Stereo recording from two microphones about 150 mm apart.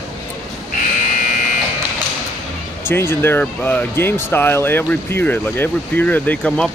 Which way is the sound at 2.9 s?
15° left (ahead or behind).